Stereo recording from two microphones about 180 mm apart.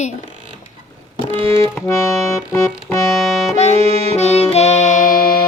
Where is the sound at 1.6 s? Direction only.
15° left (ahead or behind).